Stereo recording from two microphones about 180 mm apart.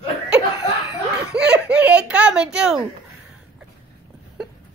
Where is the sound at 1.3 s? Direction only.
5° right (ahead or behind).